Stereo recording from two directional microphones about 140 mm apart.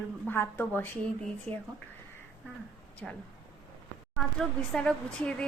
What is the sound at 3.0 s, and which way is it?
A woman's voice, 5° left (ahead or behind).